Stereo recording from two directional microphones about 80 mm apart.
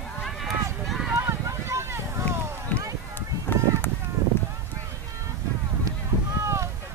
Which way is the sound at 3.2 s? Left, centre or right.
Left.